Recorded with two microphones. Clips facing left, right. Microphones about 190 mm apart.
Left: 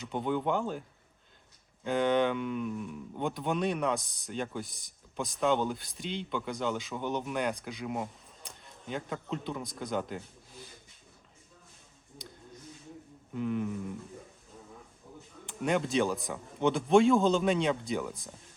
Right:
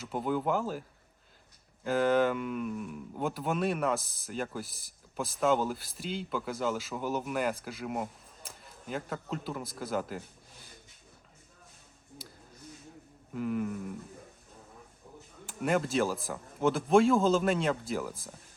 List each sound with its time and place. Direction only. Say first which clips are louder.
0.0 s speech: even; 5° right (ahead or behind)
12.2 s a sound: left 4 dB; 5° right (ahead or behind)
13.3 s speech: even; 5° right (ahead or behind)
15.4 s speech: even; centre (ahead or behind)